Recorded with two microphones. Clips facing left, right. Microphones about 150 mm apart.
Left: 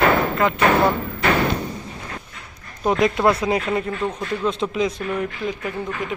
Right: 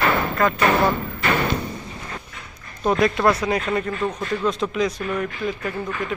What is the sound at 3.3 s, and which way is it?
Speech, 20° left (ahead or behind).